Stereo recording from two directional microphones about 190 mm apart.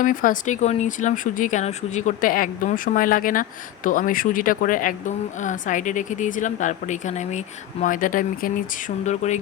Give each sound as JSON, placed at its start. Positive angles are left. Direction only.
{"t": 0.0, "sound": "speech", "side_deg": 45}